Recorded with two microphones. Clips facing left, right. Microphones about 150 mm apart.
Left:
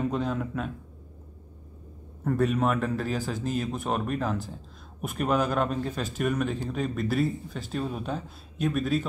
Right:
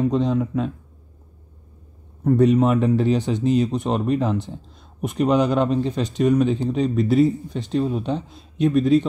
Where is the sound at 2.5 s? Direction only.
25° right (ahead or behind).